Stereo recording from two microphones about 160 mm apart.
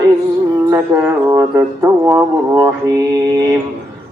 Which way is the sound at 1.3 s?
20° right (ahead or behind).